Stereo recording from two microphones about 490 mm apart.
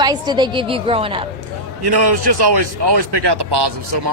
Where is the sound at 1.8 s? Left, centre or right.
Right.